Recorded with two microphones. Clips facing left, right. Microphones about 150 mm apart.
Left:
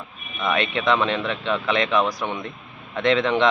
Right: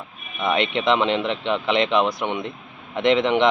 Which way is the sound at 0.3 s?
20° right (ahead or behind).